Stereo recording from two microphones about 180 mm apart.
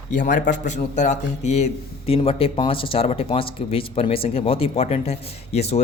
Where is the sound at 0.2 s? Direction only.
45° left (ahead or behind).